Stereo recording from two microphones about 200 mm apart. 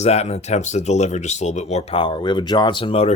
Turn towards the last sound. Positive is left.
turn(degrees=30)  # may be behind; listen again after turning